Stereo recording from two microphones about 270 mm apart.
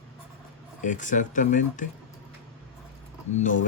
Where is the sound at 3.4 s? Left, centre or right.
Left.